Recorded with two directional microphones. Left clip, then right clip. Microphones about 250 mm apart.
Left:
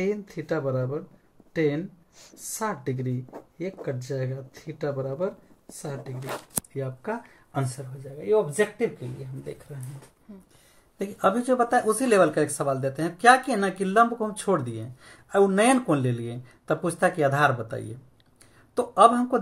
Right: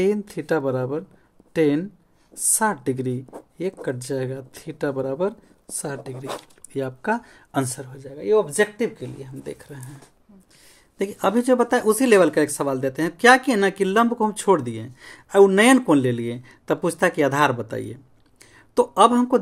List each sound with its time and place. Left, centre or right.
0.0 s speech: right
11.0 s speech: right